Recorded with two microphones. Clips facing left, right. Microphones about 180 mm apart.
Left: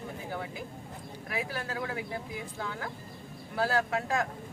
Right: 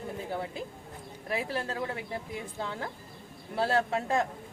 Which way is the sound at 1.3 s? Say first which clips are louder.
Right 3 dB; 25° right (ahead or behind).